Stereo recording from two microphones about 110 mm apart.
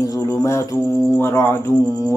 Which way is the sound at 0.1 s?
30° left (ahead or behind).